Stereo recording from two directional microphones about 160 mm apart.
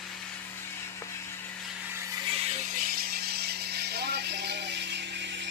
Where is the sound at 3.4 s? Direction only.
90° right.